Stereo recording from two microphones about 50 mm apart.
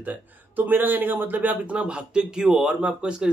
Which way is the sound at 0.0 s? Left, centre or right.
Right.